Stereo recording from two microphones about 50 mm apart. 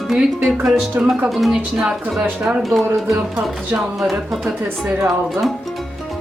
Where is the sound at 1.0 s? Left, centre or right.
Right.